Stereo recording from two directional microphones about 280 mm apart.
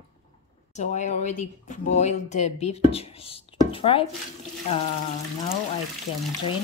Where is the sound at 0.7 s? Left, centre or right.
Left.